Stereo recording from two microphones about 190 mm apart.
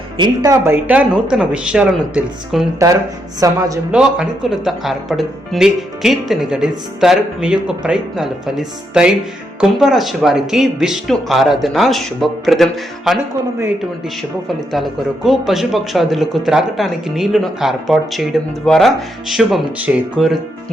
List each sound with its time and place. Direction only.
0.2 s speech: 15° right (ahead or behind)
2.7 s a woman's voice: 15° right (ahead or behind)
3.9 s speech: 5° right (ahead or behind)
14.7 s speech: centre (ahead or behind)